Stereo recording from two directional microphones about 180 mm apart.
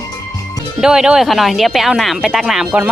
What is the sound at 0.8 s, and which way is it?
Speech, 5° right (ahead or behind).